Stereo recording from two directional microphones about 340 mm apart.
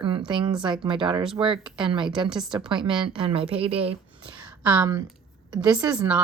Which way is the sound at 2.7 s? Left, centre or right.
Centre.